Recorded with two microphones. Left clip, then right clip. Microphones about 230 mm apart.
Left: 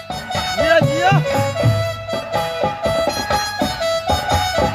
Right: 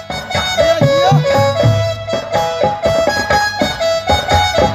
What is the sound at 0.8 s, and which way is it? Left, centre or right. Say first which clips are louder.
Music: right 5 dB; right.